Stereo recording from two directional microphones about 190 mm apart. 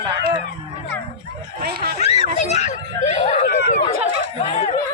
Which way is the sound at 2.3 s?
35° left (ahead or behind).